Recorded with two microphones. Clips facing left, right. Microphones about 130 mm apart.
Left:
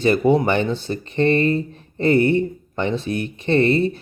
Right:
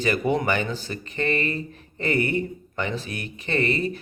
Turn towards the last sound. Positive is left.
turn(degrees=30)  # may be behind; listen again after turning